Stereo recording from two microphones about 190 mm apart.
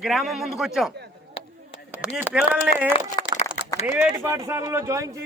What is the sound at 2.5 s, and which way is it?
Speech, 5° right (ahead or behind).